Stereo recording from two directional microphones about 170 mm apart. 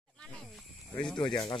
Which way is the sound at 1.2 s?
30° left (ahead or behind).